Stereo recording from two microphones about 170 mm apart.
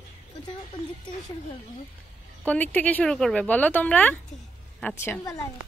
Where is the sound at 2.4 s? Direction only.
10° left (ahead or behind).